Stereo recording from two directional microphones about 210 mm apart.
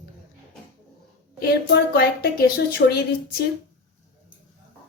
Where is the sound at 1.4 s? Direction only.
50° left (ahead or behind).